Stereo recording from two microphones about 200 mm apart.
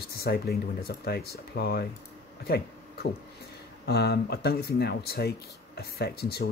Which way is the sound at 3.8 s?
55° left (ahead or behind).